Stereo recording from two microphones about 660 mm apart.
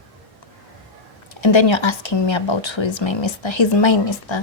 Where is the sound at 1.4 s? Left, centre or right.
Left.